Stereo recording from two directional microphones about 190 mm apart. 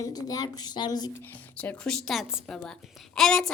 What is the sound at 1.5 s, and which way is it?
A woman's voice, 5° left (ahead or behind).